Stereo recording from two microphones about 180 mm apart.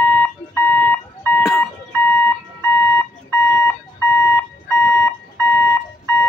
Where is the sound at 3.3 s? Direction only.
15° left (ahead or behind).